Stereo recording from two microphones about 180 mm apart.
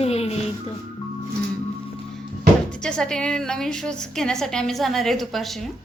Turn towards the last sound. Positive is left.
turn(degrees=0)  # may be behind; listen again after turning